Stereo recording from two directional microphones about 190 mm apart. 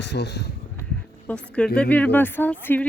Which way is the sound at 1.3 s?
5° left (ahead or behind).